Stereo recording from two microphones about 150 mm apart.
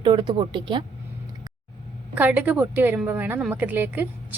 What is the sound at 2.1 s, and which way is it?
A woman's voice, 10° right (ahead or behind).